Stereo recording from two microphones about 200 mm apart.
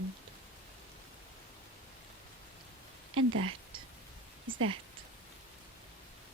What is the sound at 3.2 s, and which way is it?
Speech, 90° right.